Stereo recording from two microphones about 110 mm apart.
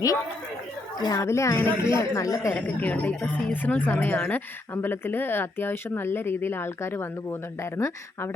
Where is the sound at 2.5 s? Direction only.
15° left (ahead or behind).